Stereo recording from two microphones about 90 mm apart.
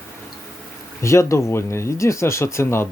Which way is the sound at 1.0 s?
35° left (ahead or behind).